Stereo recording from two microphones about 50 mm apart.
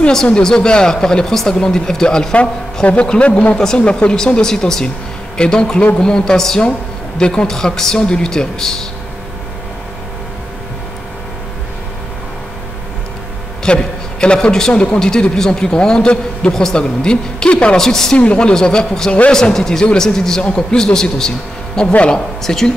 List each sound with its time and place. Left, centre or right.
0.1 s a man's voice: centre
3.5 s a man's voice: centre
13.7 s a man's voice: centre
17.8 s a man's voice: centre
18.1 s a man's voice: left
21.9 s speech: left
22.4 s a man's voice: centre